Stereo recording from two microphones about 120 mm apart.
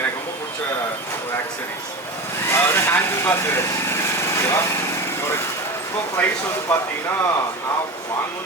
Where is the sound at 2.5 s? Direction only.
20° left (ahead or behind).